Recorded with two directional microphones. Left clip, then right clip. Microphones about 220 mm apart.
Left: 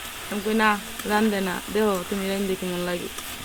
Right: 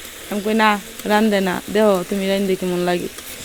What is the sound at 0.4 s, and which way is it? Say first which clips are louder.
Sizzle: right 5 dB; 35° right (ahead or behind).